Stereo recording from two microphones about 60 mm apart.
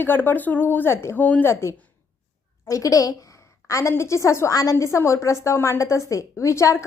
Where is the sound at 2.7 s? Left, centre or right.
Left.